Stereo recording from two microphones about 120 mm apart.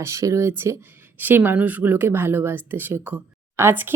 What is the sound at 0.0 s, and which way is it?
A woman's voice, 25° right (ahead or behind).